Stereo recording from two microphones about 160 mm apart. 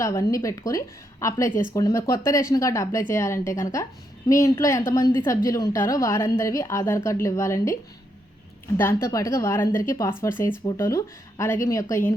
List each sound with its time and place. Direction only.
0.0 s a woman's voice: 20° left (ahead or behind)
8.8 s a woman's voice: 15° left (ahead or behind)